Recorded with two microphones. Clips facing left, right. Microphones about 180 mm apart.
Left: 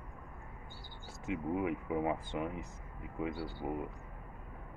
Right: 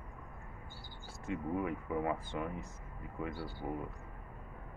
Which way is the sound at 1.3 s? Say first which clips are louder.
Left 2 dB; 15° left (ahead or behind).